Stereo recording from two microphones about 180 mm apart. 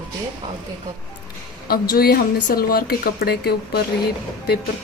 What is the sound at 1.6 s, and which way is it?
A woman's voice, 55° left (ahead or behind).